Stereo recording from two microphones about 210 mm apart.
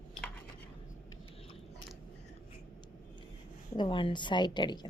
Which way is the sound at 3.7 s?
25° left (ahead or behind).